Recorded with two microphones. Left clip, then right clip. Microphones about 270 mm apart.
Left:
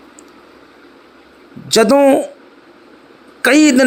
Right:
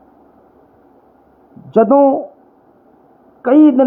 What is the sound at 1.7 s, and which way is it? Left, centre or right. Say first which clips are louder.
Speech: left 1 dB; left.